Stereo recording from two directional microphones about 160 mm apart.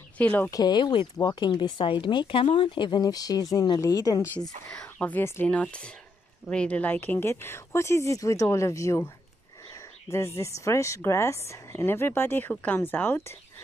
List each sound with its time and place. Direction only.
0.2 s speech: 10° left (ahead or behind)
0.5 s speech: 25° left (ahead or behind)
4.6 s speech: 10° left (ahead or behind)